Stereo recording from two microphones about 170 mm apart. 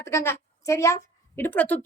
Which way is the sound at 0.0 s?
15° left (ahead or behind).